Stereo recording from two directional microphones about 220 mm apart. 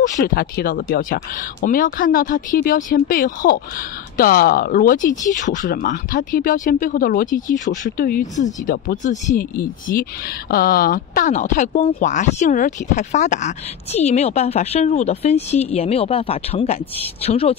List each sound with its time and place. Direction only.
0.2 s a woman's voice: 40° left (ahead or behind)